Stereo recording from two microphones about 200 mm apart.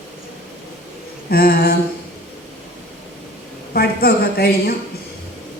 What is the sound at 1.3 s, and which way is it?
Speech, 50° left (ahead or behind).